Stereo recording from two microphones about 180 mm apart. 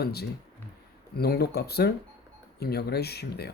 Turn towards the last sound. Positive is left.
turn(degrees=65)  # may be behind; listen again after turning